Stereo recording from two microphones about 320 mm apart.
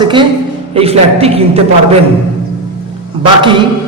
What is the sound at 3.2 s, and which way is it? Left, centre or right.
Speech, centre.